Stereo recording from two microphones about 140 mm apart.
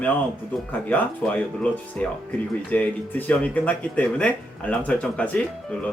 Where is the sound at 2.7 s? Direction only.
10° left (ahead or behind).